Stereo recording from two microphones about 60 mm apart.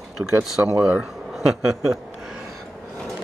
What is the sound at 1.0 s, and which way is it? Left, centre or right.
Speech, centre.